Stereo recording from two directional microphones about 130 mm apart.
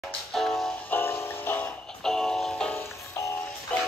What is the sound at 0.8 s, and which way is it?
Music, 15° left (ahead or behind).